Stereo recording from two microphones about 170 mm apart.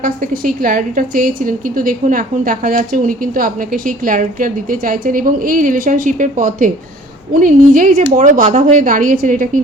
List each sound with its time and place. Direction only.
0.0 s a woman's voice: 55° right (ahead or behind)